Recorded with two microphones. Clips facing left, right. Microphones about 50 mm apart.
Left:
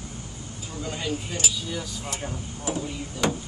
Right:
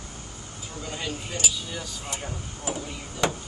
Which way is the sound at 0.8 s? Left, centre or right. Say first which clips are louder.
Left 3 dB; centre.